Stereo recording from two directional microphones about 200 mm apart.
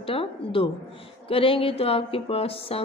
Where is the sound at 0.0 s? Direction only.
25° left (ahead or behind).